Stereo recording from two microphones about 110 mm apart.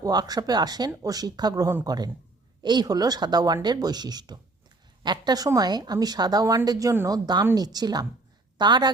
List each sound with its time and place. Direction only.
0.0 s a woman's voice: 35° right (ahead or behind)